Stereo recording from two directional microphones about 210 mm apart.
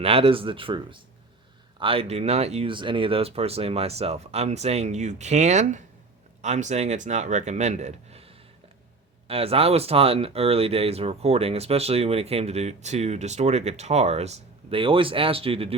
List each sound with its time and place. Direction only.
0.0 s speech: 25° right (ahead or behind)